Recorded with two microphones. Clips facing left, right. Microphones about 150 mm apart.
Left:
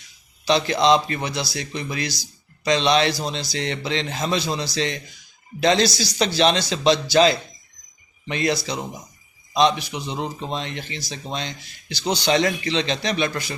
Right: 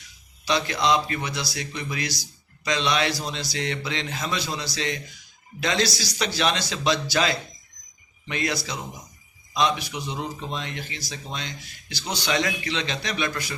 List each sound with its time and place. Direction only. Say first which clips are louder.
0.4 s a man's voice: left 5 dB; 30° left (ahead or behind)